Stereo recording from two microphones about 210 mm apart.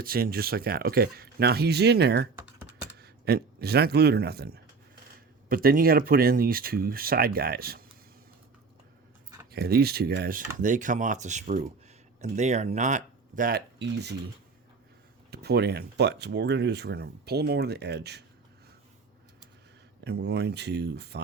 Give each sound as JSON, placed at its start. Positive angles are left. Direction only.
{"t": 0.0, "sound": "speech", "side_deg": -45}
{"t": 9.5, "sound": "speech", "side_deg": -50}
{"t": 15.3, "sound": "speech", "side_deg": -50}
{"t": 20.1, "sound": "speech", "side_deg": -55}